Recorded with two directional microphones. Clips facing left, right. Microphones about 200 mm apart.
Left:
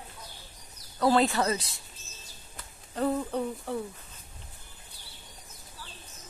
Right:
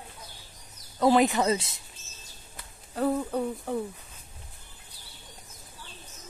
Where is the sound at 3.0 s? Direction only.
5° right (ahead or behind).